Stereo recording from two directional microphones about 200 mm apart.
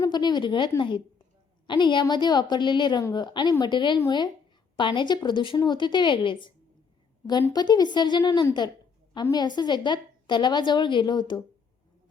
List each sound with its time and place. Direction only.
0.0 s a woman's voice: 20° left (ahead or behind)